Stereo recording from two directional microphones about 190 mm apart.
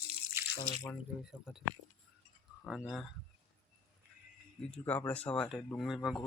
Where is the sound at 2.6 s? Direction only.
Centre (ahead or behind).